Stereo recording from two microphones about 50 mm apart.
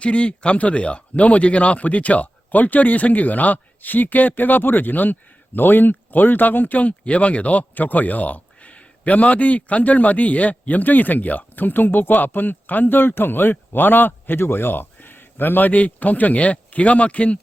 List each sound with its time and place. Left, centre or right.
0.0 s speech: left